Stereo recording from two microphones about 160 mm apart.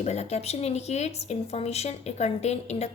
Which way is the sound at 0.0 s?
40° left (ahead or behind).